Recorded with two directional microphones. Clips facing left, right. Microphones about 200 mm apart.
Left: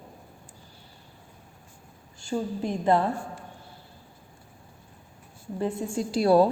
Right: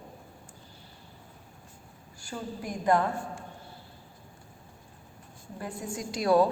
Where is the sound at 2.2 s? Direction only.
25° left (ahead or behind).